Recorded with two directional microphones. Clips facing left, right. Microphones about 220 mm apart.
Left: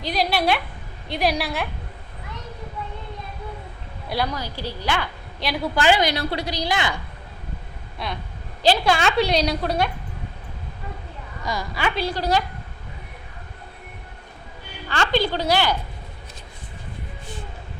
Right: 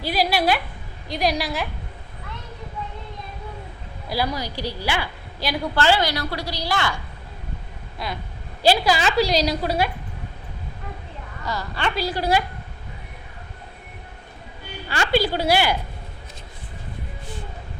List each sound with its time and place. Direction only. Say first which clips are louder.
0.0 s a sound: right 1 dB; 5° right (ahead or behind)
1.0 s a woman's voice: even; centre (ahead or behind)
4.1 s a woman's voice: right 1 dB; 10° right (ahead or behind)
5.7 s a woman's voice: left 1 dB; 15° left (ahead or behind)
7.9 s a sound: even; centre (ahead or behind)
8.6 s a woman's voice: even; 5° right (ahead or behind)
11.4 s a woman's voice: left 1 dB; 10° left (ahead or behind); by 12.4 s 10° right (ahead or behind)
14.8 s a woman's voice: right 1 dB; 10° right (ahead or behind)